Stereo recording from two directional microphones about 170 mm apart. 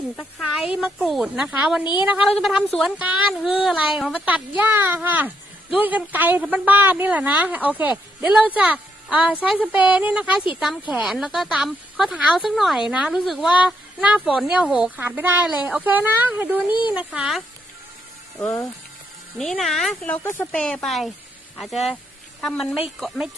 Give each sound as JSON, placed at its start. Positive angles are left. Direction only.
{"t": 0.2, "sound": "speech", "side_deg": 0}
{"t": 1.8, "sound": "a woman's voice", "side_deg": 25}
{"t": 2.0, "sound": "a woman's voice", "side_deg": -5}
{"t": 19.4, "sound": "speech", "side_deg": 0}
{"t": 22.4, "sound": "speech", "side_deg": 0}